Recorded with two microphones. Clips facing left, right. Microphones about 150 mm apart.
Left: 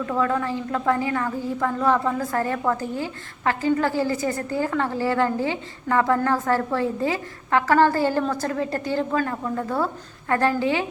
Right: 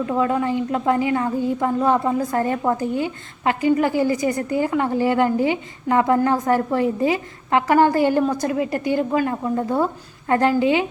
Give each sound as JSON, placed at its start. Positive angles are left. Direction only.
{"t": 0.0, "sound": "a woman's voice", "side_deg": -20}